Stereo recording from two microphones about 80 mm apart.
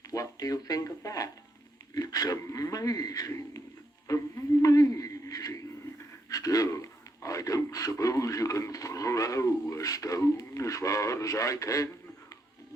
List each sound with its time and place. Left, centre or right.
0.1 s a man's voice: left